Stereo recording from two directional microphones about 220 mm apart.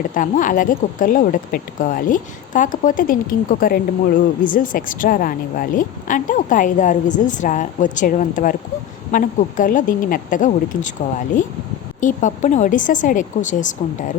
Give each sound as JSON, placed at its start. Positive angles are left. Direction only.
{"t": 0.1, "sound": "speech", "side_deg": 35}
{"t": 11.9, "sound": "speech", "side_deg": 35}